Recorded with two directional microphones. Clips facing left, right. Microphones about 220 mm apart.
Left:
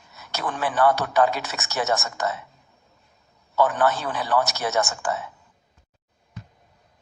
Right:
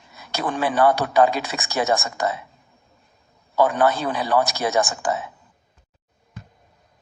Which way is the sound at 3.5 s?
15° right (ahead or behind).